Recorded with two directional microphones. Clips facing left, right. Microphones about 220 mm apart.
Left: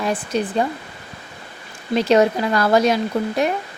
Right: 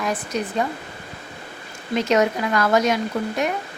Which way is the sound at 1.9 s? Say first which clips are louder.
Left 4 dB; 30° left (ahead or behind).